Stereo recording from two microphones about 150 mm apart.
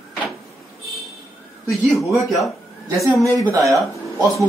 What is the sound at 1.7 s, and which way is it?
Speech, centre (ahead or behind).